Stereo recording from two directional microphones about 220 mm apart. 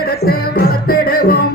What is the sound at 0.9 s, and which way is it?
Music, 40° left (ahead or behind).